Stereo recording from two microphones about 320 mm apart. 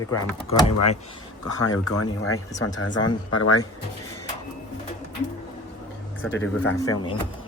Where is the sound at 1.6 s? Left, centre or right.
Left.